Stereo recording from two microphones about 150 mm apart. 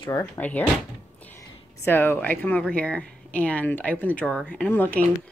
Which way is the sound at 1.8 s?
15° left (ahead or behind).